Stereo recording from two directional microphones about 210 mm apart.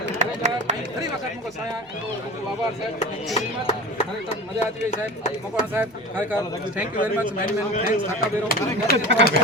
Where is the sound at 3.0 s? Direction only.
30° left (ahead or behind).